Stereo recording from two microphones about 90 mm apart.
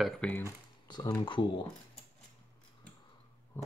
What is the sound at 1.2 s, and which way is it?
Speech, 60° left (ahead or behind).